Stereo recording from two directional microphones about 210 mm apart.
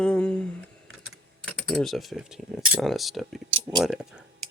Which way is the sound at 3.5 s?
30° right (ahead or behind).